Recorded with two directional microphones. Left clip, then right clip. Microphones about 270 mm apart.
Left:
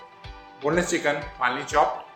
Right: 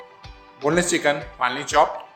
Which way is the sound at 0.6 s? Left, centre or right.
Right.